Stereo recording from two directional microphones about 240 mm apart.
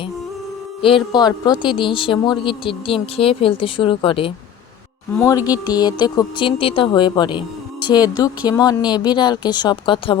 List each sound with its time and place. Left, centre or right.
0.8 s speech: left
5.1 s speech: centre